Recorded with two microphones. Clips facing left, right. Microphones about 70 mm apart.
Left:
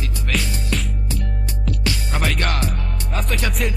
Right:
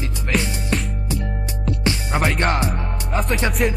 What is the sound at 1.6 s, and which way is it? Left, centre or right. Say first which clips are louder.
Music: right 3 dB; right.